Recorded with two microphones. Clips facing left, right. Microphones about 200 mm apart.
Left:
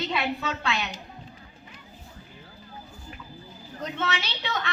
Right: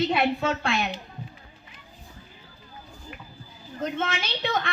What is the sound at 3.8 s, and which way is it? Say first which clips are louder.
Speech: right 2 dB; 50° right (ahead or behind).